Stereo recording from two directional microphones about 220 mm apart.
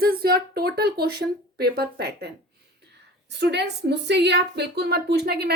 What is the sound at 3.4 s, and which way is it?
A woman's voice, 50° right (ahead or behind).